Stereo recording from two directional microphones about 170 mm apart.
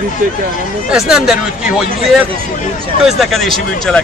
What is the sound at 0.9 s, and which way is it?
Speech, 5° right (ahead or behind).